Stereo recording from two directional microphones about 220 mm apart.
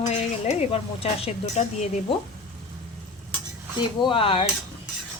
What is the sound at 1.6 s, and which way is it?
Speech, 30° left (ahead or behind).